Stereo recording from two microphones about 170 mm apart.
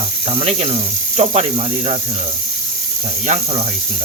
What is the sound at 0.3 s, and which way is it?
Speech, 35° right (ahead or behind).